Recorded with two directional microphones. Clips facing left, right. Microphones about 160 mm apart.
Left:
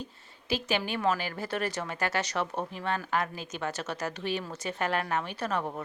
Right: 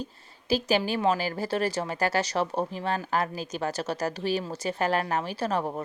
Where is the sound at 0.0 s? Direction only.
35° right (ahead or behind).